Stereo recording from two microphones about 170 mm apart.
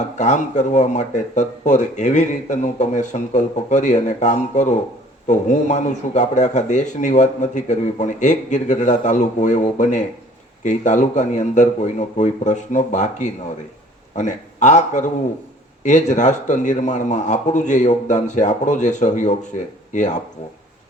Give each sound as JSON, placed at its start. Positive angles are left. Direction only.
{"t": 0.0, "sound": "speech", "side_deg": 45}